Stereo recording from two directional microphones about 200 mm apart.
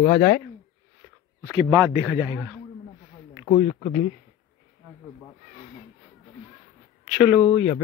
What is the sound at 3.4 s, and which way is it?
Speech, 40° left (ahead or behind).